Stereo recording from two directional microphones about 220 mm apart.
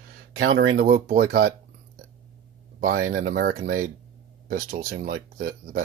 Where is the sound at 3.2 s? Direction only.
40° right (ahead or behind).